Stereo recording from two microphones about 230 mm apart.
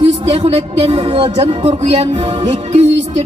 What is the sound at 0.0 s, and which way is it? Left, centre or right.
A woman's voice, right.